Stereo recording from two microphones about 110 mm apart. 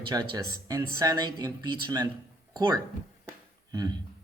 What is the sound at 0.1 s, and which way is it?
Speech, 40° right (ahead or behind).